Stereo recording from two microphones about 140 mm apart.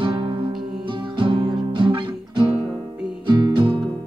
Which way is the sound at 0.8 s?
35° right (ahead or behind).